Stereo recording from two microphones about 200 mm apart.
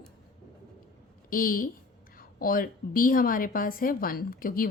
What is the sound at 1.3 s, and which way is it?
A woman's voice, 45° left (ahead or behind).